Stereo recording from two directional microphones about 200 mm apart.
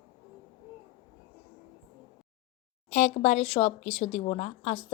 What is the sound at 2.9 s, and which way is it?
Speech, 35° left (ahead or behind).